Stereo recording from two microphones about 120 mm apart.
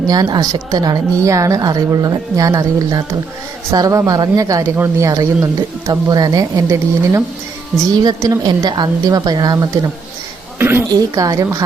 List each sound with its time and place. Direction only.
0.1 s a woman's voice: 35° right (ahead or behind)
10.6 s a sound: 20° right (ahead or behind)
10.9 s a woman's voice: 30° right (ahead or behind)